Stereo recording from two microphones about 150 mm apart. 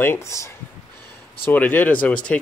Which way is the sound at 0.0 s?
15° left (ahead or behind).